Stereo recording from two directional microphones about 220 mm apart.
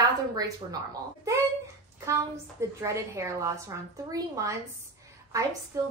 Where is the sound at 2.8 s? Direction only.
15° right (ahead or behind).